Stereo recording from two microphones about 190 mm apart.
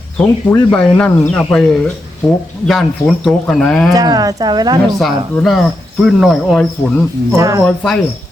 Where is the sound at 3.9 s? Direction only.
20° right (ahead or behind).